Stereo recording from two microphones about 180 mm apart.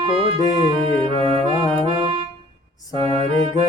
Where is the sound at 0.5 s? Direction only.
30° right (ahead or behind).